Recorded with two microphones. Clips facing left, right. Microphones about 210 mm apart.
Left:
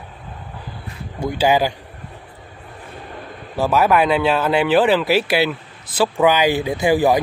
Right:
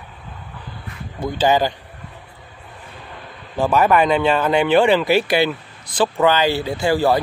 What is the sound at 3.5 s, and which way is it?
Speech, 5° left (ahead or behind).